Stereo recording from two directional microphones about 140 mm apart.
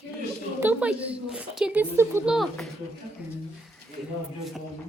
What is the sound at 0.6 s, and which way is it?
Speech, 10° right (ahead or behind).